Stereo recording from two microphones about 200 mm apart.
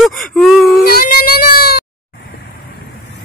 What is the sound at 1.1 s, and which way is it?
Speech, 50° left (ahead or behind).